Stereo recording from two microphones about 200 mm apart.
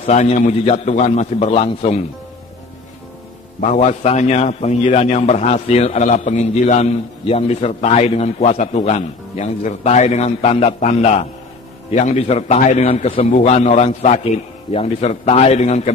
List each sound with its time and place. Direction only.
0.0 s a man's voice: 35° left (ahead or behind)
3.7 s a man's voice: 35° left (ahead or behind)